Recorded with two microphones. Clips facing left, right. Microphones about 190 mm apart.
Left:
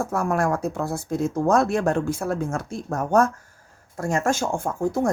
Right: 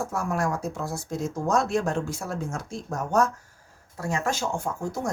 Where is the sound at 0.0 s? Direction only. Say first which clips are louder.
Left 4 dB; 55° left (ahead or behind).